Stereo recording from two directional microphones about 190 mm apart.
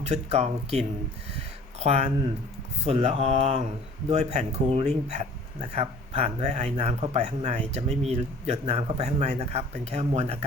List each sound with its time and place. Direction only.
0.1 s speech: 35° right (ahead or behind)